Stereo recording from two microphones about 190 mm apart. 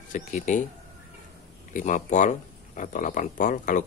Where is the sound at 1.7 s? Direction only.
45° left (ahead or behind).